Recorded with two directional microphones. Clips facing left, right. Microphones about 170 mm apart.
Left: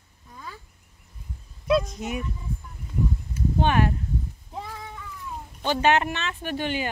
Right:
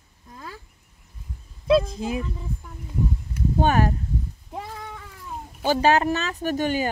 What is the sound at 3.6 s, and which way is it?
Speech, 40° right (ahead or behind).